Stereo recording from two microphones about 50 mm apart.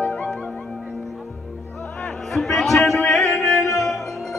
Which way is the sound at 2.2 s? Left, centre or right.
Centre.